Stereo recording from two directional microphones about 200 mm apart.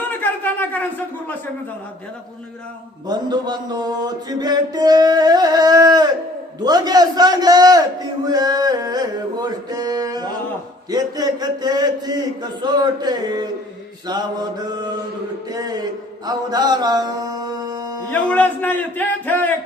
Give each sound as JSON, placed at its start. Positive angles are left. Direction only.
{"t": 0.2, "sound": "a sound", "side_deg": 10}
{"t": 3.1, "sound": "a man's voice", "side_deg": -20}
{"t": 15.5, "sound": "mantra", "side_deg": -20}
{"t": 18.1, "sound": "a man's voice", "side_deg": 10}